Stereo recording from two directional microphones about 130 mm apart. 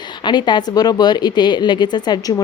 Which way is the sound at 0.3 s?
35° left (ahead or behind).